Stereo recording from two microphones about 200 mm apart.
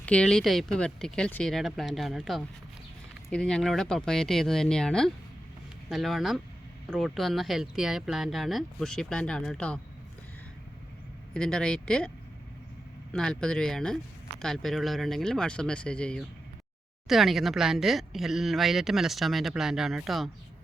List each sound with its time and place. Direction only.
0.0 s speech: 5° left (ahead or behind)
11.3 s speech: 5° left (ahead or behind)
13.1 s speech: 5° left (ahead or behind)